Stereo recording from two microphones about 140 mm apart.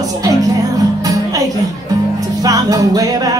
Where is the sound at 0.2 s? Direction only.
25° right (ahead or behind).